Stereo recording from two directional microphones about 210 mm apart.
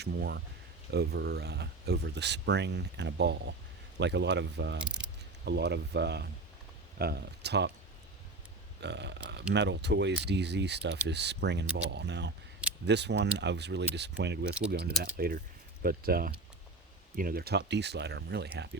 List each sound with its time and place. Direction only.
0.0 s speech: 50° right (ahead or behind)
4.8 s speech: 5° right (ahead or behind)
5.5 s speech: 55° right (ahead or behind)
8.8 s speech: 55° right (ahead or behind)